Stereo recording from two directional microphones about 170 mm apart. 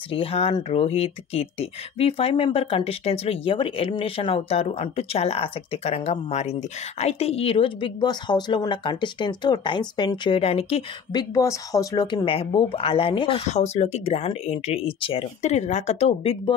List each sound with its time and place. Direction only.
0.1 s speech: 35° left (ahead or behind)
11.3 s speech: 20° left (ahead or behind); by 16.5 s 35° left (ahead or behind)